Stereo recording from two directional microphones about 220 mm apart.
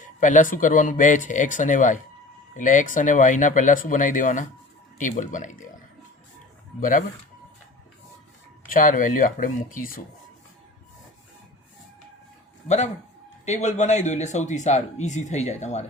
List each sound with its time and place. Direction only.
0.0 s speech: 35° left (ahead or behind)
6.7 s speech: 35° left (ahead or behind)
8.7 s speech: 35° left (ahead or behind)
12.6 s a man's voice: 30° left (ahead or behind)